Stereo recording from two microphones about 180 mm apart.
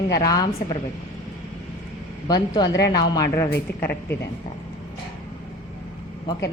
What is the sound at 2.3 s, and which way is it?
A woman's voice, 20° left (ahead or behind).